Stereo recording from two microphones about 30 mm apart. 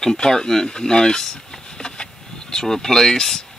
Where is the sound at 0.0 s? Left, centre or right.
Left.